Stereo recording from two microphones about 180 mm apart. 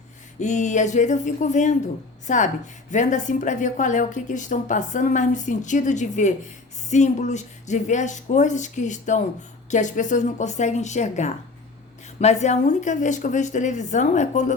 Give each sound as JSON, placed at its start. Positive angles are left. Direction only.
{"t": 0.3, "sound": "a woman's voice", "side_deg": 40}